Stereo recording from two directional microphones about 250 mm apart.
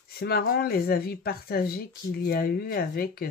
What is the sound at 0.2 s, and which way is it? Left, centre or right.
Speech, left.